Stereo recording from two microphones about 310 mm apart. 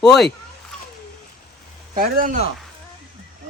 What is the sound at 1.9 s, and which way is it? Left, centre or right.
Speech, right.